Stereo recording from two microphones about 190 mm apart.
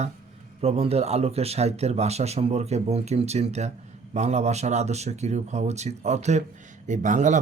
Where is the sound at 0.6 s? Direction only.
30° right (ahead or behind).